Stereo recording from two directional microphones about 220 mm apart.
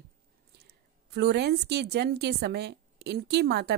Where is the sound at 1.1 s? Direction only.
45° right (ahead or behind).